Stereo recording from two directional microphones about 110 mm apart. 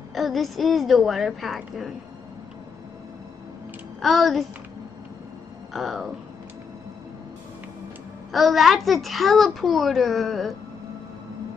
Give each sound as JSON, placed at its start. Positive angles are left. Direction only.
{"t": 0.1, "sound": "a child's voice", "side_deg": 0}
{"t": 4.0, "sound": "a child's voice", "side_deg": 0}
{"t": 5.7, "sound": "a child's voice", "side_deg": 0}
{"t": 8.3, "sound": "a child's voice", "side_deg": 0}